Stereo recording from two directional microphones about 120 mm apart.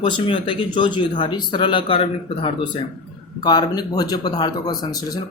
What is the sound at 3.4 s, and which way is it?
Speech, 35° left (ahead or behind).